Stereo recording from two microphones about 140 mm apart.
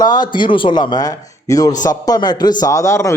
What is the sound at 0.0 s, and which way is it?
A man's voice, 30° left (ahead or behind).